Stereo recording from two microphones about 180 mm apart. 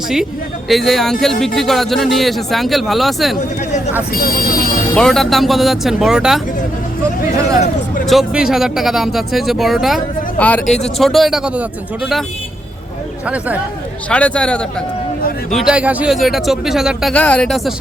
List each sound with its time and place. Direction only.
0.7 s speech: centre (ahead or behind)
4.1 s speech: 55° left (ahead or behind)
4.9 s speech: 5° left (ahead or behind)
8.0 s speech: centre (ahead or behind)
13.2 s speech: 5° right (ahead or behind)
14.1 s speech: 5° left (ahead or behind)